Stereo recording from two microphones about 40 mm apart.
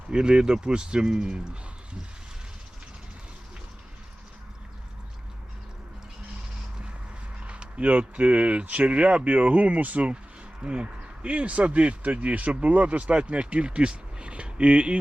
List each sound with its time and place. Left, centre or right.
0.1 s speech: right
7.3 s speech: right